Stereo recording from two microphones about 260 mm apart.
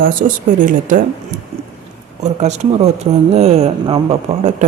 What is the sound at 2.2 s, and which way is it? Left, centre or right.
Speech, right.